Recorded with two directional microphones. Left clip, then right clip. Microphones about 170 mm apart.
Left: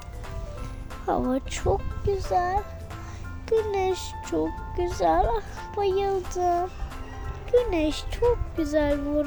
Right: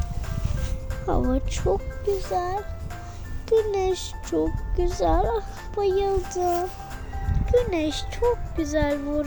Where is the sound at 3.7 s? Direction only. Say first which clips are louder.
Right 1 dB; 10° left (ahead or behind).